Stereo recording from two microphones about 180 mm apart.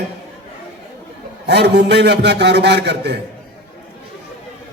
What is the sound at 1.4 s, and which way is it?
A man's voice, 70° right (ahead or behind).